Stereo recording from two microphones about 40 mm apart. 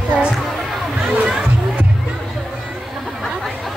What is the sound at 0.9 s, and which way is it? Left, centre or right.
Music, right.